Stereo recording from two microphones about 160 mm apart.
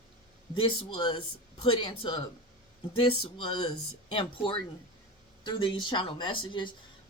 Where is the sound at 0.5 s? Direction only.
35° left (ahead or behind).